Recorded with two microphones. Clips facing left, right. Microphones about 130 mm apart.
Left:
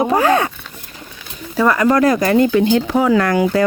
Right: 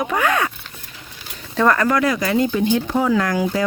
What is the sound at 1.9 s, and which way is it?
Speech, 40° left (ahead or behind).